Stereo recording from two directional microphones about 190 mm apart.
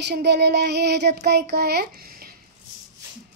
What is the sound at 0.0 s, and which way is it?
Child singing, 60° right (ahead or behind).